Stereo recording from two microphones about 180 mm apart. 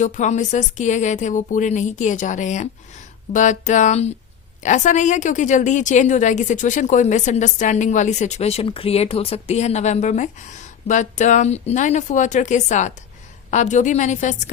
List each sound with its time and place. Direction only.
0.0 s a woman's voice: 40° left (ahead or behind)